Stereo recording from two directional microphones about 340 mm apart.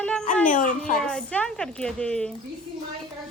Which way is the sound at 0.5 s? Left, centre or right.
Left.